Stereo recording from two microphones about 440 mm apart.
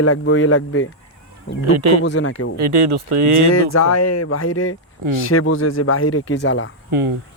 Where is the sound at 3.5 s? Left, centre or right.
Left.